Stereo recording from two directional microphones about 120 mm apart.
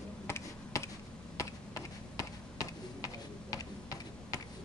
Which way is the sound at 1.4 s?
25° left (ahead or behind).